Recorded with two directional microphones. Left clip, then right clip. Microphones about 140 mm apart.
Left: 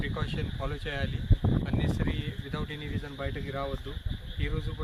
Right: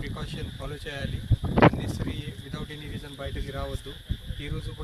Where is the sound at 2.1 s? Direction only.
25° right (ahead or behind).